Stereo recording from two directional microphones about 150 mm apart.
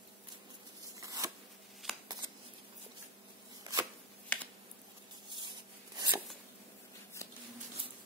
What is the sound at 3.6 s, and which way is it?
Shuffling cards, 25° right (ahead or behind).